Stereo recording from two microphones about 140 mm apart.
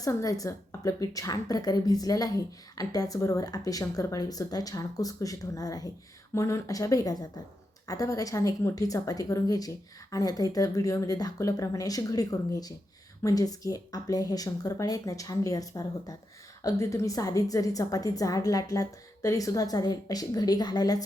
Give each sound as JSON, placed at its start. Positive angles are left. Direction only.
{"t": 0.0, "sound": "a woman's voice", "side_deg": 25}